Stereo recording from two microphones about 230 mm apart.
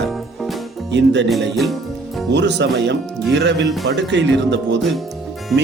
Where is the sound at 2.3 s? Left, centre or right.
Right.